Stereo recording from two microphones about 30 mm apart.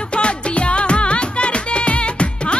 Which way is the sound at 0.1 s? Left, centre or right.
Left.